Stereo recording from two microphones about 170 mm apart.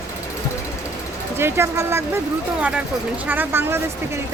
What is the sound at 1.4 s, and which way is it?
Speech, 15° right (ahead or behind).